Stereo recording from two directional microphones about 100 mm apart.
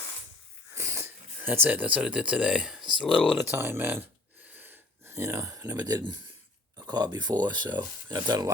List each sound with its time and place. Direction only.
0.7 s speech: 30° right (ahead or behind); by 3.1 s 5° right (ahead or behind)
3.1 s speech: 5° left (ahead or behind)
3.4 s speech: 20° right (ahead or behind)
4.5 s a sound: 20° right (ahead or behind); by 6.0 s 40° right (ahead or behind)
6.7 s speech: 40° right (ahead or behind)
8.1 s stir: 40° right (ahead or behind)